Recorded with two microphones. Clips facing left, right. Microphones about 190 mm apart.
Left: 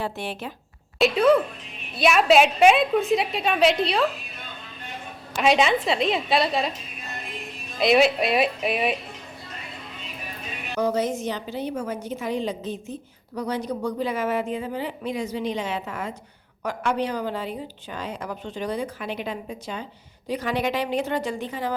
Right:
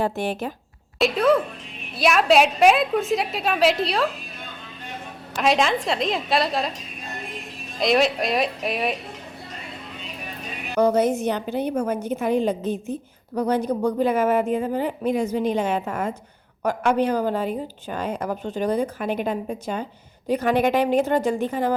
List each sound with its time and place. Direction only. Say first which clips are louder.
0.0 s a woman's voice: right 6 dB; 45° right (ahead or behind)
0.9 s a woman's voice: left 1 dB; centre (ahead or behind)
5.4 s a woman's voice: left 1 dB; centre (ahead or behind)
7.8 s a woman's voice: left 1 dB; centre (ahead or behind)
10.8 s a woman's voice: right 5 dB; 55° right (ahead or behind)